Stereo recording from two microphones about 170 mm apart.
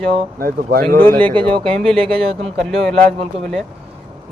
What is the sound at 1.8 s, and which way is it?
Speech, 5° left (ahead or behind).